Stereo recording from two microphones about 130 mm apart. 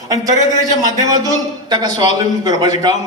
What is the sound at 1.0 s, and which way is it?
A man's voice, 30° right (ahead or behind).